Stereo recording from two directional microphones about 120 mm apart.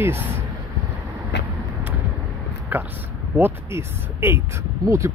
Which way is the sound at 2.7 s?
15° right (ahead or behind).